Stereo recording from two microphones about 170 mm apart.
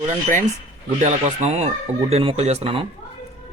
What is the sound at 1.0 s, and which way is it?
Speech, 45° right (ahead or behind).